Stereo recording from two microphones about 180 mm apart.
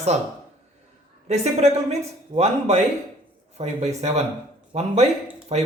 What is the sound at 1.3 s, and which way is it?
A man's voice, 35° right (ahead or behind).